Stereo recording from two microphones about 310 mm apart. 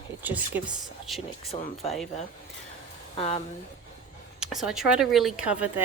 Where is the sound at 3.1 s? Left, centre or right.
Centre.